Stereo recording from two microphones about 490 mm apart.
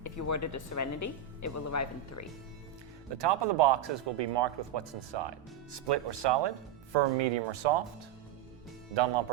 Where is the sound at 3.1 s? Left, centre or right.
Right.